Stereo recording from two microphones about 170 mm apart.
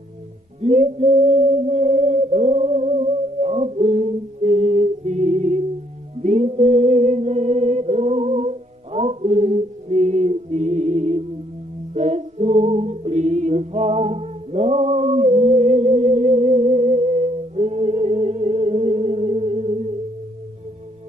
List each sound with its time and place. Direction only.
0.6 s music: 40° right (ahead or behind)